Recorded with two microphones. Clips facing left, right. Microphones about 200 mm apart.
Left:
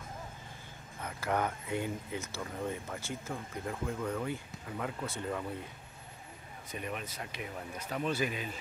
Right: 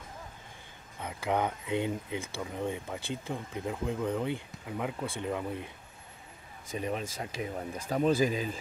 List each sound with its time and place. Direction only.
1.0 s speech: 15° right (ahead or behind)
6.8 s speech: 30° right (ahead or behind)